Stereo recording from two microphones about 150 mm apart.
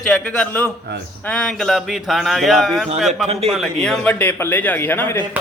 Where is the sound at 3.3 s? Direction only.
40° right (ahead or behind).